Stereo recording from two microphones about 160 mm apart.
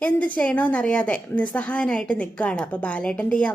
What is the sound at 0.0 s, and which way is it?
A woman's voice, 10° left (ahead or behind).